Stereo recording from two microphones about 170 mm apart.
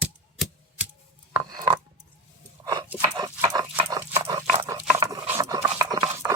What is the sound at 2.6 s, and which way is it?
Dog, 20° right (ahead or behind).